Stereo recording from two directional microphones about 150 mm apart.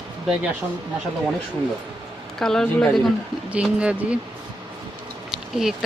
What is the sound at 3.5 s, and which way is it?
Speech, 10° right (ahead or behind).